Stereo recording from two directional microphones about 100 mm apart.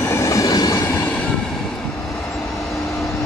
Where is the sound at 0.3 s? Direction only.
40° left (ahead or behind).